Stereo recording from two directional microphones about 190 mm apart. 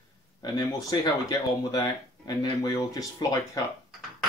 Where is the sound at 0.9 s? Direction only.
20° left (ahead or behind).